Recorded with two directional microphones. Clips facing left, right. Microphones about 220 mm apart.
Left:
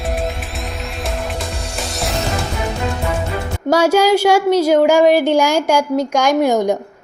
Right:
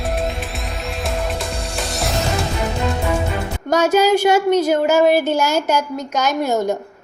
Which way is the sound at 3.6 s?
10° left (ahead or behind).